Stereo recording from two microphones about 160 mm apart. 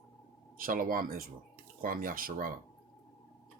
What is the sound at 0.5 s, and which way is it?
Speech, 60° right (ahead or behind).